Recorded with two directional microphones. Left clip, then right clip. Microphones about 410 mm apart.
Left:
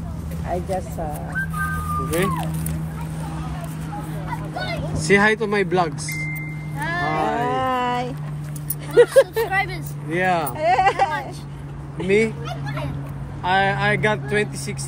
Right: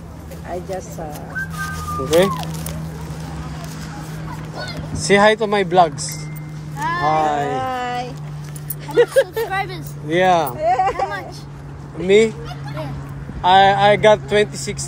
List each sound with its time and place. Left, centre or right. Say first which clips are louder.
2.0 s speech: right 11 dB; centre
5.0 s speech: right 4 dB; centre
7.5 s a sound: left 1 dB; centre
8.9 s speech: left 1 dB; centre
9.5 s speech: left 1 dB; centre
10.6 s a sound: even; left
12.1 s speech: right 5 dB; centre
13.4 s speech: right 8 dB; centre